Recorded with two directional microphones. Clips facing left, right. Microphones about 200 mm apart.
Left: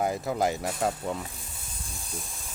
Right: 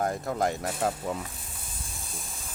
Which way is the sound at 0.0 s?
5° left (ahead or behind).